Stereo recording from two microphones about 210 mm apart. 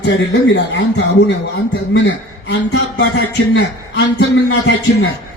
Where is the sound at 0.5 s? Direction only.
55° left (ahead or behind).